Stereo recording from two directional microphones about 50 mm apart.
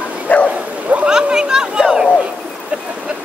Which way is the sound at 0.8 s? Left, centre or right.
Right.